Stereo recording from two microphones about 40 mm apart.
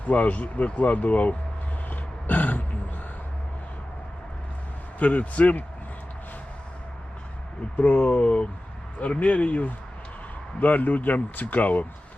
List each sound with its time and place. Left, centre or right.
0.0 s speech: left
1.9 s grunt: left
4.9 s speech: left
7.8 s speech: left